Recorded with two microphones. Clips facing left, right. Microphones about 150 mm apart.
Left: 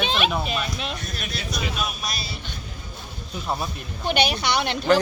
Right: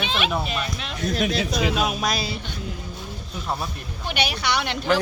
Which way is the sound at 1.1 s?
90° right.